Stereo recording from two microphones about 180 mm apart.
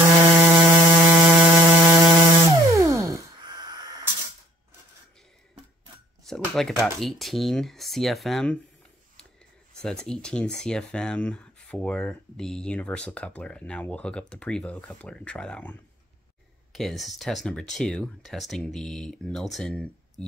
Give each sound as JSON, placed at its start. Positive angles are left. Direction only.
{"t": 0.4, "sound": "mains hum", "side_deg": -15}
{"t": 6.2, "sound": "speech", "side_deg": 0}
{"t": 9.8, "sound": "speech", "side_deg": 5}